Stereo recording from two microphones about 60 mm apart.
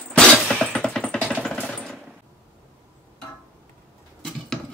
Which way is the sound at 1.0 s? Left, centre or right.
Left.